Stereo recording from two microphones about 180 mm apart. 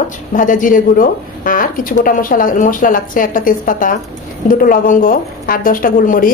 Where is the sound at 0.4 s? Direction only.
45° left (ahead or behind).